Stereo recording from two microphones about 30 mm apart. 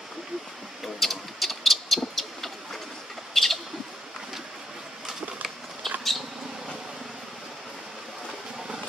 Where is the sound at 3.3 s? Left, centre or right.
Centre.